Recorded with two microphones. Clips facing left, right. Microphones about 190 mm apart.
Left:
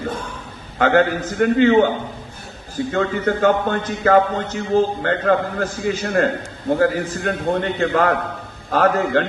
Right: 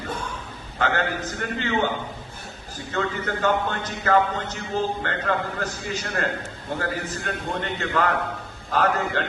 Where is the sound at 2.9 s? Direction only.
50° left (ahead or behind).